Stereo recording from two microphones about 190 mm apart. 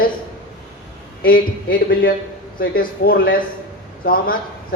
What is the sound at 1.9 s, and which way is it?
Speech, 50° left (ahead or behind).